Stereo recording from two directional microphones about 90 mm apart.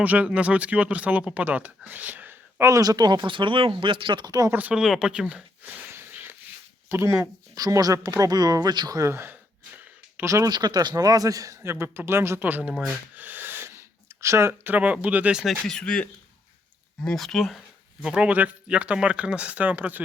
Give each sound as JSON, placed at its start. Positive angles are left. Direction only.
{"t": 0.0, "sound": "speech", "side_deg": -15}
{"t": 2.6, "sound": "speech", "side_deg": -40}
{"t": 4.3, "sound": "a man's voice", "side_deg": -40}
{"t": 4.7, "sound": "speech", "side_deg": -5}
{"t": 5.6, "sound": "wheeze", "side_deg": -20}
{"t": 6.8, "sound": "speech", "side_deg": -30}
{"t": 9.0, "sound": "a sound", "side_deg": -30}
{"t": 10.2, "sound": "a man's voice", "side_deg": -35}
{"t": 10.5, "sound": "a man's voice", "side_deg": -50}
{"t": 13.1, "sound": "a sound", "side_deg": -20}
{"t": 15.6, "sound": "speech", "side_deg": 10}
{"t": 18.0, "sound": "speech", "side_deg": -10}